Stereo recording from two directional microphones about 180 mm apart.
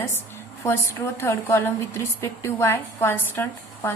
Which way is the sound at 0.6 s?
15° left (ahead or behind).